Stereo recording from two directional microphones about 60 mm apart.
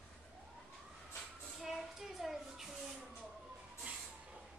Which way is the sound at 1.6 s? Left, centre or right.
Centre.